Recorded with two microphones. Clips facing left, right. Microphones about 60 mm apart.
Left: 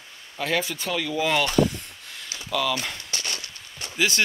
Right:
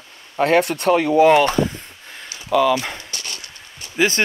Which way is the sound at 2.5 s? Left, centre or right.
Centre.